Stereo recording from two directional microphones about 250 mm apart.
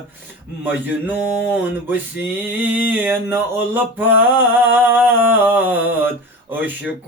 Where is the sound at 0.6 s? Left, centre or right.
Centre.